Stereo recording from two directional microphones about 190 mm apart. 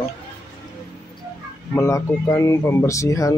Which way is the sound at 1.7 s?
15° left (ahead or behind).